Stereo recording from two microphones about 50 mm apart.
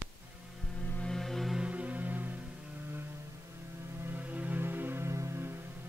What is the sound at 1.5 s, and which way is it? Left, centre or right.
Music, right.